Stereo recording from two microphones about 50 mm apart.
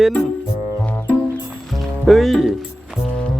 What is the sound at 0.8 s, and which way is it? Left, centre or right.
Music, left.